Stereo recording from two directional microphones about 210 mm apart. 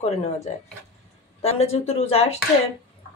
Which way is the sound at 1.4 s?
30° left (ahead or behind).